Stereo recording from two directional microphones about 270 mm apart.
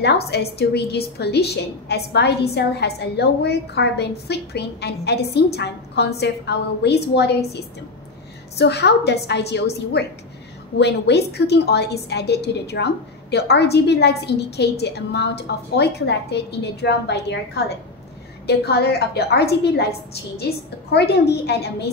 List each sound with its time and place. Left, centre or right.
0.0 s a woman's voice: left
8.5 s a woman's voice: left
18.5 s a woman's voice: left